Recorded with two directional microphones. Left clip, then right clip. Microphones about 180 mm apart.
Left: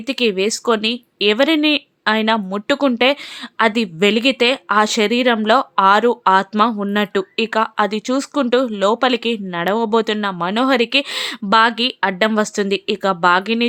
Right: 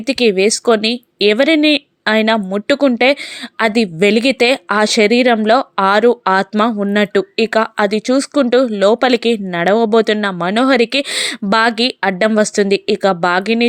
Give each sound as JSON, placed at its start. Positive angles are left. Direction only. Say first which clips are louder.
{"t": 0.1, "sound": "speech", "louder": "right 5 dB", "side_deg": -15}